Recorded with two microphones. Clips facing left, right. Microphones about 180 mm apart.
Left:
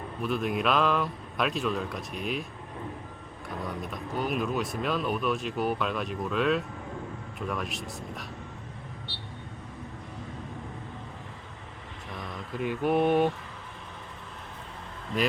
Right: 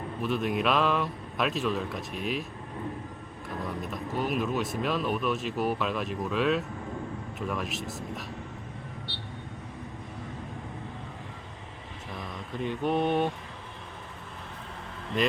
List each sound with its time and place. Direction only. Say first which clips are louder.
0.2 s speech: even; centre (ahead or behind)
3.6 s speech: right 1 dB; centre (ahead or behind)
12.1 s mantra: left 1 dB; 5° left (ahead or behind)